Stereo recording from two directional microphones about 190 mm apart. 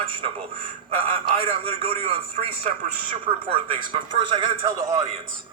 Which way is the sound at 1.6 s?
30° right (ahead or behind).